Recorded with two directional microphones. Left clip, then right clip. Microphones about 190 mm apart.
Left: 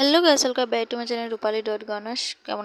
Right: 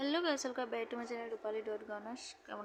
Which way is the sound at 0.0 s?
75° left (ahead or behind).